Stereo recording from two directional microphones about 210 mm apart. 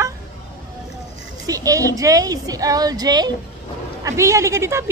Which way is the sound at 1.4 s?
15° right (ahead or behind).